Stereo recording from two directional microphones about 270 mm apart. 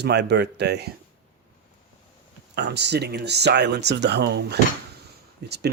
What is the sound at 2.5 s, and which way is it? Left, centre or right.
Speech, right.